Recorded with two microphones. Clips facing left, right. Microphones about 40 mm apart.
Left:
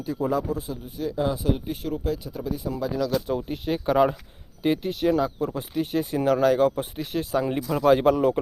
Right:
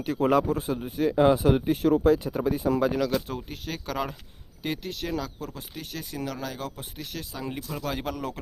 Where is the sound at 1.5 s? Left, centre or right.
Right.